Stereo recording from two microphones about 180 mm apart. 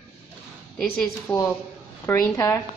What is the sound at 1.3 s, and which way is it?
A woman's voice, 10° left (ahead or behind).